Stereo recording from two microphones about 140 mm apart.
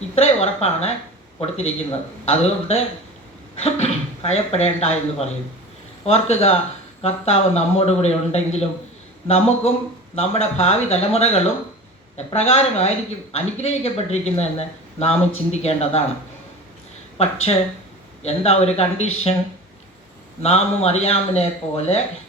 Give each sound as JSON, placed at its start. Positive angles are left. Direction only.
{"t": 0.2, "sound": "speech", "side_deg": 50}
{"t": 6.1, "sound": "speech", "side_deg": 45}
{"t": 17.2, "sound": "speech", "side_deg": 50}
{"t": 20.4, "sound": "speech", "side_deg": 50}